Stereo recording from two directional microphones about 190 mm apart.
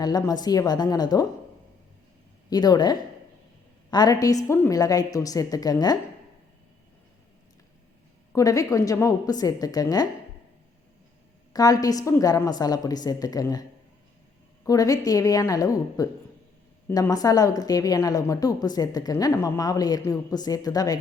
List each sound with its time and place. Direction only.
0.0 s a woman's voice: 20° left (ahead or behind)
2.5 s a woman's voice: 20° left (ahead or behind)
8.3 s a woman's voice: 15° left (ahead or behind)
11.5 s a woman's voice: 20° left (ahead or behind)